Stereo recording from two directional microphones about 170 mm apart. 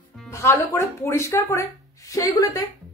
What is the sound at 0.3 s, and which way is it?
Speech, 15° left (ahead or behind).